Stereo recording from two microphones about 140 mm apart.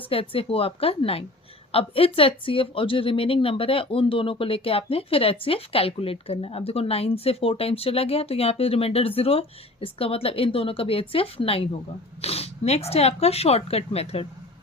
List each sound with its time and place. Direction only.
0.1 s speech: 40° left (ahead or behind)